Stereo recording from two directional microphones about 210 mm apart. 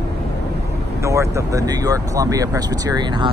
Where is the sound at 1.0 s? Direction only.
15° right (ahead or behind).